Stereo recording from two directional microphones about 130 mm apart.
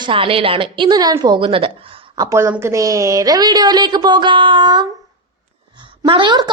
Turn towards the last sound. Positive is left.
turn(degrees=-35)  # may be behind; listen again after turning